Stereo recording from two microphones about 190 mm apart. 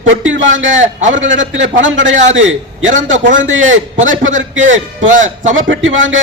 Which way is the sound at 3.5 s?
90° right.